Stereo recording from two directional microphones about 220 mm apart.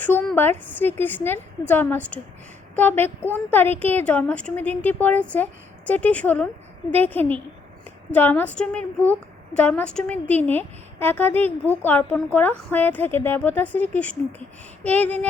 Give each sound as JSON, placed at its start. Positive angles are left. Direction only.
{"t": 0.0, "sound": "a woman's voice", "side_deg": 5}